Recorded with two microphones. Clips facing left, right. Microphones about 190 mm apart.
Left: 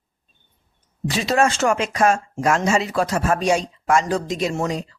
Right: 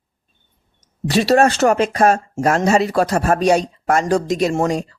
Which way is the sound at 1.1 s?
65° right (ahead or behind).